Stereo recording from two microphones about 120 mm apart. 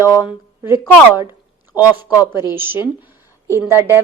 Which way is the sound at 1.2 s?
20° right (ahead or behind).